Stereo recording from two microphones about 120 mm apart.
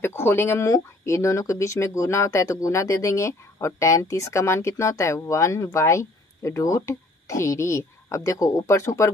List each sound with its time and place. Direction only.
0.0 s speech: 20° left (ahead or behind)